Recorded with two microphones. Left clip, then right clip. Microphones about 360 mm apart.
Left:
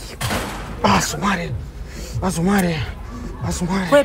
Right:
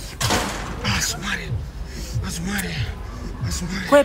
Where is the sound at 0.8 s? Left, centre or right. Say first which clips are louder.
Left 8 dB; centre.